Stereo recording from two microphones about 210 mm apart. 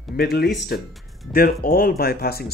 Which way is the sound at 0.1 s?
50° left (ahead or behind).